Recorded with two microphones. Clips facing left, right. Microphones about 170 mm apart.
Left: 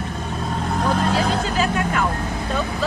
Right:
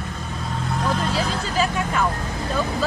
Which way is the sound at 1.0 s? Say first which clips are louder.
Left 4 dB; 60° left (ahead or behind).